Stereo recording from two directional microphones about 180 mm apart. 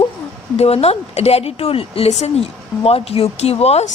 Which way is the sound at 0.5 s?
35° left (ahead or behind).